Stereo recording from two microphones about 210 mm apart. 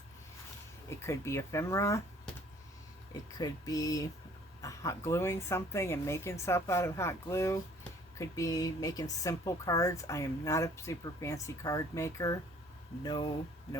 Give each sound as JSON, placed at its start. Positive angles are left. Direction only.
{"t": 0.9, "sound": "speech", "side_deg": 15}
{"t": 3.3, "sound": "speech", "side_deg": 20}